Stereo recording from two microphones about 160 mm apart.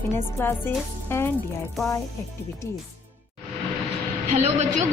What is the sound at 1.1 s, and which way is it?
Speech, 15° left (ahead or behind).